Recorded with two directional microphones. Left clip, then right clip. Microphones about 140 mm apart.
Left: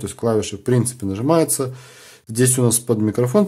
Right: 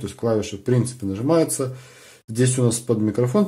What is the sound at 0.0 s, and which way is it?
Speech, 30° left (ahead or behind).